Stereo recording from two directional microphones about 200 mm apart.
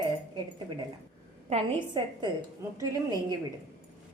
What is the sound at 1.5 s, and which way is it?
A woman's voice, 25° right (ahead or behind).